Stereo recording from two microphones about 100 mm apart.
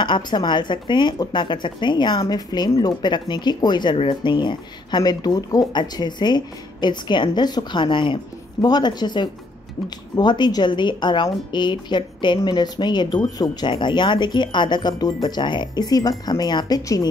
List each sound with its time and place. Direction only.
0.0 s speech: 50° left (ahead or behind)
3.9 s speech: 60° left (ahead or behind)
8.5 s speech: 45° left (ahead or behind)